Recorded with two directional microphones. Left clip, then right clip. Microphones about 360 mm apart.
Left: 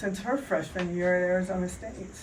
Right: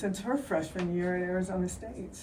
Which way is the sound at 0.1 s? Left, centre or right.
Centre.